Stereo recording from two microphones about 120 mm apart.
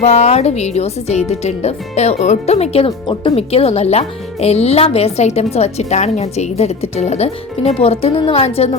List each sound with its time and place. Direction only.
0.0 s speech: 65° left (ahead or behind)